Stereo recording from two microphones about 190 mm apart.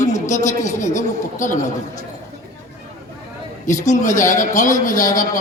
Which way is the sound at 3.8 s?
40° left (ahead or behind).